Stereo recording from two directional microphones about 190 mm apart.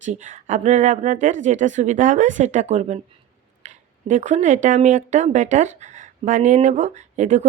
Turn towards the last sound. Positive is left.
turn(degrees=-40)  # may be behind; listen again after turning